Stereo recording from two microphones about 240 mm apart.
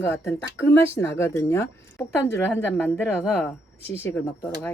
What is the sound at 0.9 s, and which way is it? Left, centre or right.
Speech, centre.